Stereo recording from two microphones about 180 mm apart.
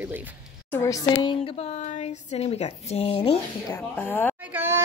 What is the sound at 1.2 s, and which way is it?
Speech, 30° left (ahead or behind).